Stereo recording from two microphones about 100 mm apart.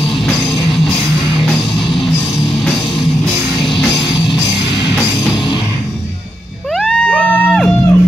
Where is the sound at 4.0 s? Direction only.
55° left (ahead or behind).